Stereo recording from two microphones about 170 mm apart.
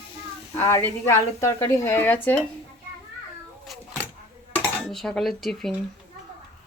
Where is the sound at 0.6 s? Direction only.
15° left (ahead or behind).